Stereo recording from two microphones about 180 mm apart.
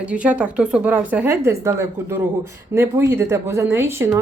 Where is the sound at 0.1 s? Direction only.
5° right (ahead or behind).